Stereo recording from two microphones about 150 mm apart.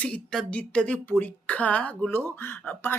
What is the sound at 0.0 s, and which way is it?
Speech, 5° left (ahead or behind).